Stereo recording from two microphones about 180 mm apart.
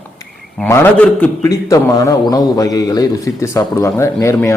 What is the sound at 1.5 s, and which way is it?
A man's voice, 20° left (ahead or behind).